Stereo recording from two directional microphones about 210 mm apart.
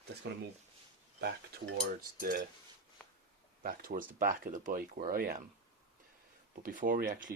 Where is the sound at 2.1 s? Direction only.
40° right (ahead or behind).